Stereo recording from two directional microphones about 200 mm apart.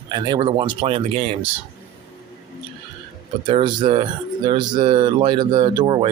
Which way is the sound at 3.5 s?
25° right (ahead or behind).